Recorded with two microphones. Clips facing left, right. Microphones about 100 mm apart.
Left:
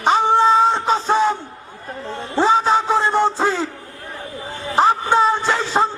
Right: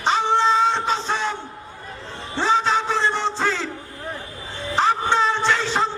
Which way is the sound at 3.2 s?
40° left (ahead or behind).